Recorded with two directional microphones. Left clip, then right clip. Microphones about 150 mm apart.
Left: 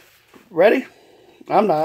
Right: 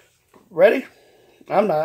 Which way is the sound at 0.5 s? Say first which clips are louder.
Even; 45° left (ahead or behind).